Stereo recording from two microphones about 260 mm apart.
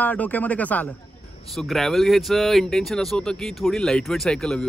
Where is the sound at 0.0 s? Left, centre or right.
Centre.